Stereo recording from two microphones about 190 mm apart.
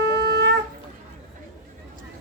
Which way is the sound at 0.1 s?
60° right (ahead or behind).